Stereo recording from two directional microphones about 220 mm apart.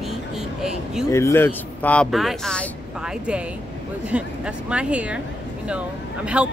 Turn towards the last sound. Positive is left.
turn(degrees=-5)  # may be behind; listen again after turning